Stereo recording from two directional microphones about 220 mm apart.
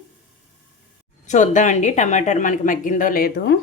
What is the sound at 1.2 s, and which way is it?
Speech, 35° left (ahead or behind).